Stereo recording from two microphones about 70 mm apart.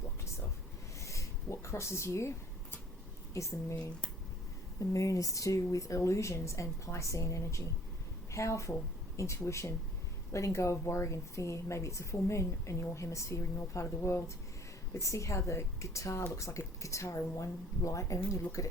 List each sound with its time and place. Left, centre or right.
0.9 s a sound: left
3.3 s speech: left
4.8 s a woman's voice: left